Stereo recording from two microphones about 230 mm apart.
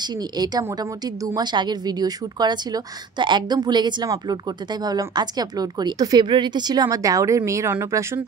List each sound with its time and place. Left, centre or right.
0.0 s a woman's voice: centre